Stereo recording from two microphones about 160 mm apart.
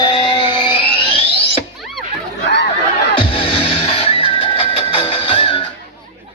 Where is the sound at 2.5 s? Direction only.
90° left.